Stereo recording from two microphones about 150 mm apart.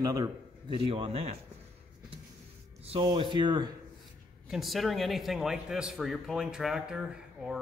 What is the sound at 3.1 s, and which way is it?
Speech, 30° right (ahead or behind).